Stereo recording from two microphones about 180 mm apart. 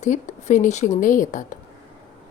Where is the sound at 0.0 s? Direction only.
40° left (ahead or behind).